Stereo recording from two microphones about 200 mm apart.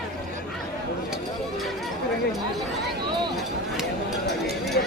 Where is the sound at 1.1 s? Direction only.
Centre (ahead or behind).